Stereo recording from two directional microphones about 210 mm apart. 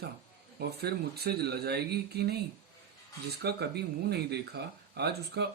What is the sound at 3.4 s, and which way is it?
Speech, 50° right (ahead or behind).